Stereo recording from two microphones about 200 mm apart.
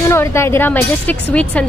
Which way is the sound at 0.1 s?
15° left (ahead or behind).